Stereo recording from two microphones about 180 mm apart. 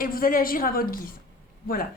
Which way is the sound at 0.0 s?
50° left (ahead or behind).